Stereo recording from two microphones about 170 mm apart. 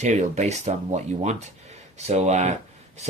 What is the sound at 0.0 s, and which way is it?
Speech, 40° right (ahead or behind).